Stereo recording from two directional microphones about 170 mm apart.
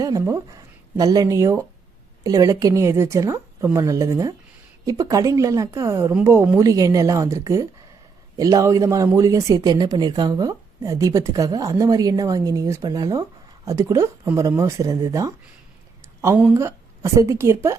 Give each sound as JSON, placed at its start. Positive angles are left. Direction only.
{"t": 0.2, "sound": "speech", "side_deg": -15}